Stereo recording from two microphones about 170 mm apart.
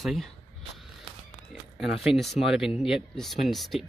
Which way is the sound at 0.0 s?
Centre (ahead or behind).